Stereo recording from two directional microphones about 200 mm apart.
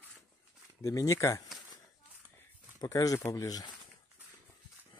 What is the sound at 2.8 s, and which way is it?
Speech, 15° left (ahead or behind).